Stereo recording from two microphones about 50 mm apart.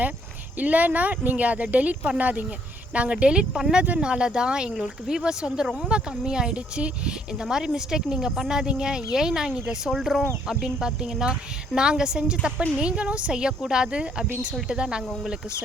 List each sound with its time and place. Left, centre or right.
0.6 s a woman's voice: right